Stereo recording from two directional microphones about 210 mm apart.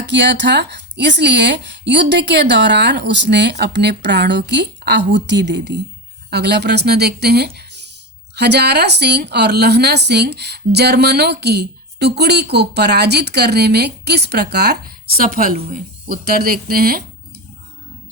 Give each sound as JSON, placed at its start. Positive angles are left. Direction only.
{"t": 0.0, "sound": "a woman's voice", "side_deg": -55}